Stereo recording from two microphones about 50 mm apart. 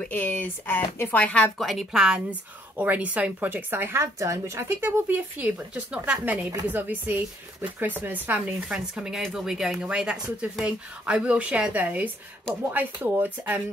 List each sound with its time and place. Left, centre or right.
0.1 s speech: left
1.0 s speech: left
1.6 s a woman's voice: centre
1.9 s speech: centre
2.8 s speech: right
4.0 s a woman's voice: right
4.6 s speech: right
5.1 s speech: right
8.6 s a woman's voice: centre; by 13.3 s right